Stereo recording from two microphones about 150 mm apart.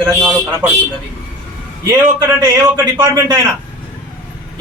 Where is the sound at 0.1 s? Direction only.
10° right (ahead or behind).